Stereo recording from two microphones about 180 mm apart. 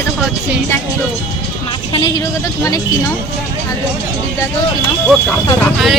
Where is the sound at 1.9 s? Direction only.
30° left (ahead or behind).